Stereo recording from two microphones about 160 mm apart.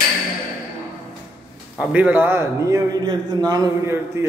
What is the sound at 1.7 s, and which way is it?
A man's voice, 5° right (ahead or behind).